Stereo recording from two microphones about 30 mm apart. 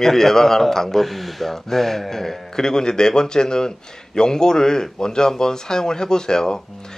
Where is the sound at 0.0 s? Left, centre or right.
Centre.